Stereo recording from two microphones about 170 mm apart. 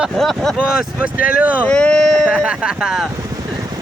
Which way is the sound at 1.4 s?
10° right (ahead or behind).